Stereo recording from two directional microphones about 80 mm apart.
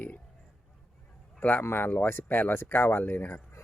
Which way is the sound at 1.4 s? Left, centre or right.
Left.